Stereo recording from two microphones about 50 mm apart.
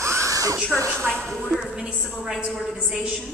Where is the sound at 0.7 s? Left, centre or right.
Right.